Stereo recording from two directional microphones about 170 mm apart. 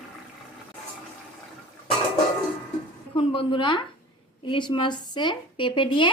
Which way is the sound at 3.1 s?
30° left (ahead or behind).